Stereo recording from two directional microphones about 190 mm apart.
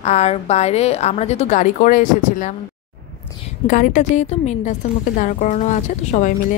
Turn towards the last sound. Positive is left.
turn(degrees=40)  # may be behind; listen again after turning